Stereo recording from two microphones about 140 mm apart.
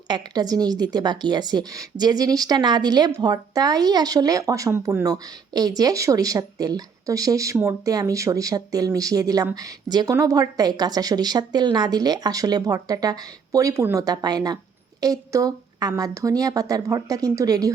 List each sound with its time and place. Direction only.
0.1 s speech: 30° right (ahead or behind)